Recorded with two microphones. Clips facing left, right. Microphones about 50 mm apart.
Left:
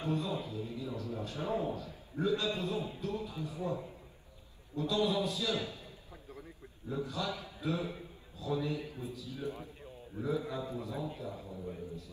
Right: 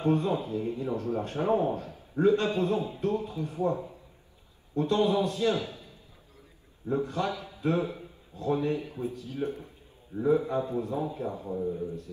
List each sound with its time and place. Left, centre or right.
0.0 s speech: right
6.9 s a man's voice: right